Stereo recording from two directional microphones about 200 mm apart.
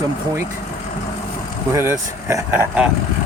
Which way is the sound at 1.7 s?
15° right (ahead or behind).